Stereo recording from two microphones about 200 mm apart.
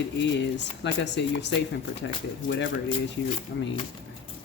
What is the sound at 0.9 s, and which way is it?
Speech, 60° left (ahead or behind).